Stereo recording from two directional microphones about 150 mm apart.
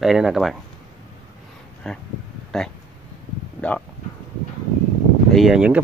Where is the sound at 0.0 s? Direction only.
Centre (ahead or behind).